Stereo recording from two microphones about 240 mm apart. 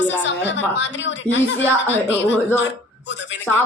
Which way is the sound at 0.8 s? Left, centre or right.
Left.